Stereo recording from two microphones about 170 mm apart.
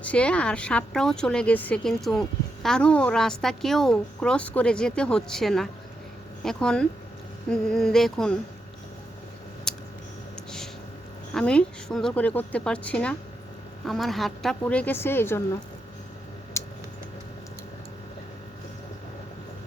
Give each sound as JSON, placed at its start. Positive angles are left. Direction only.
{"t": 0.0, "sound": "a woman's voice", "side_deg": 5}
{"t": 9.7, "sound": "a sound", "side_deg": 5}
{"t": 11.3, "sound": "speech", "side_deg": 5}
{"t": 16.6, "sound": "typing", "side_deg": 15}